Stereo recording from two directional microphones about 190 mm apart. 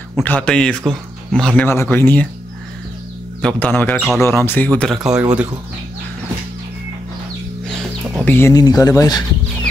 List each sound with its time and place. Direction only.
0.1 s speech: 5° left (ahead or behind)
3.4 s speech: 10° left (ahead or behind)
8.2 s speech: 10° left (ahead or behind)